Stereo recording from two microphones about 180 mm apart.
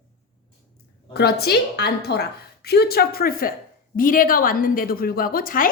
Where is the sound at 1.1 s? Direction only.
60° left (ahead or behind).